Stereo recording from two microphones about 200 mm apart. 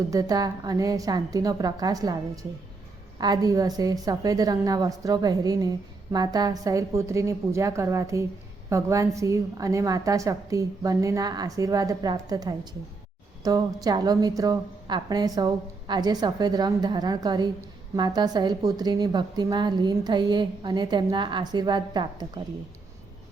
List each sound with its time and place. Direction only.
0.1 s a woman's voice: 15° right (ahead or behind)